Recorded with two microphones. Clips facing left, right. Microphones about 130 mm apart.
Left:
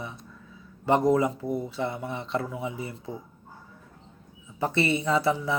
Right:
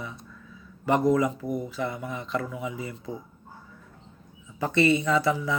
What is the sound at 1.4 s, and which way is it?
Speech, 15° right (ahead or behind).